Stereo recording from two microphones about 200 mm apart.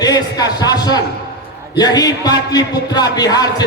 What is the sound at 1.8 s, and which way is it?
A man's voice, 20° left (ahead or behind).